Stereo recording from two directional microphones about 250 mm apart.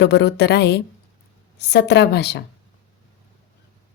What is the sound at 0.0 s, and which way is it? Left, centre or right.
A woman's voice, left.